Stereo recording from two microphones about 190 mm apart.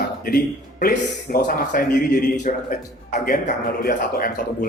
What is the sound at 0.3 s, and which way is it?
A man's voice, 50° left (ahead or behind).